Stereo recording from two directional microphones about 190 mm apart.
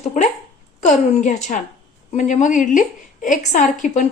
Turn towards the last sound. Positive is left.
turn(degrees=40)  # may be behind; listen again after turning